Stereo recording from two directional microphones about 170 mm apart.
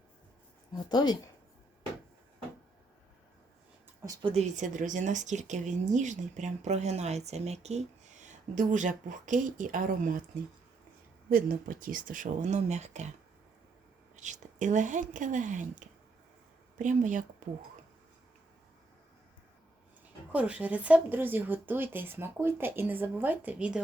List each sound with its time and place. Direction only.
0.9 s speech: 25° left (ahead or behind)
4.0 s speech: 20° right (ahead or behind)
4.4 s speech: 45° right (ahead or behind)
11.3 s speech: 55° right (ahead or behind)
14.2 s speech: 45° right (ahead or behind)
20.3 s speech: 10° right (ahead or behind)